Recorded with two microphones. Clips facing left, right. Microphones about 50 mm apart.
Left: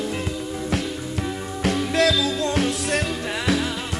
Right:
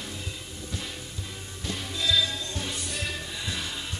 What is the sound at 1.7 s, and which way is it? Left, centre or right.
Music, left.